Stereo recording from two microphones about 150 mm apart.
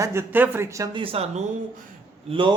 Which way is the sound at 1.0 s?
40° right (ahead or behind).